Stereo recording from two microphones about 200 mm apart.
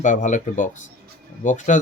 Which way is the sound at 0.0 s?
40° left (ahead or behind).